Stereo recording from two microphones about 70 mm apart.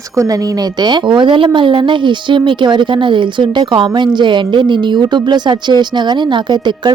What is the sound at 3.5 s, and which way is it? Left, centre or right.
A woman's voice, right.